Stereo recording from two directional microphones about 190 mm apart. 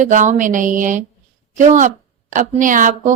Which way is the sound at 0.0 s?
40° right (ahead or behind).